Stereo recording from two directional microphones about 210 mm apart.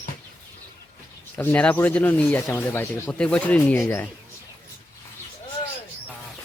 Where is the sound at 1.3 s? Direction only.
10° left (ahead or behind).